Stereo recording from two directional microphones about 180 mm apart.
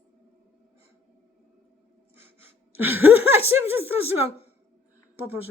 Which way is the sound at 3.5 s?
10° right (ahead or behind).